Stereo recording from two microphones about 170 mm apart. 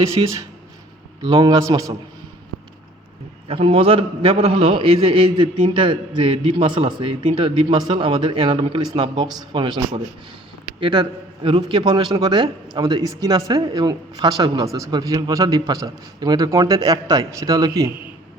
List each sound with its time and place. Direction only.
0.2 s a man's voice: 30° right (ahead or behind)
3.5 s a man's voice: 35° right (ahead or behind)